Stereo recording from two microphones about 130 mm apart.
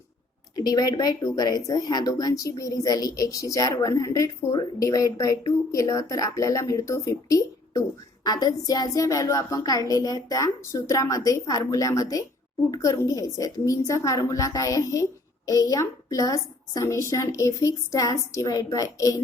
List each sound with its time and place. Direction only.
0.5 s speech: 30° left (ahead or behind)